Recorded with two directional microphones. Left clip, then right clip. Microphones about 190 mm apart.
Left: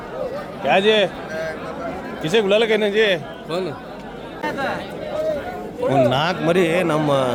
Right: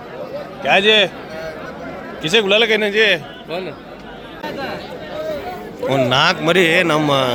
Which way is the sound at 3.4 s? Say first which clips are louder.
Left 1 dB; 60° left (ahead or behind).